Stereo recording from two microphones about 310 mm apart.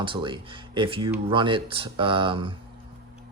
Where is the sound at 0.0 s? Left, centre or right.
Centre.